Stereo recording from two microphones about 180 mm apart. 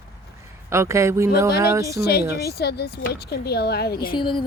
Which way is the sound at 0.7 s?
15° right (ahead or behind).